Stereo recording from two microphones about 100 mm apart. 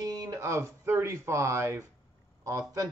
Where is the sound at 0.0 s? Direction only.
35° right (ahead or behind).